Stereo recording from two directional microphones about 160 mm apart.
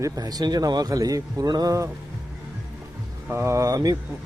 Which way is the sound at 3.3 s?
15° right (ahead or behind).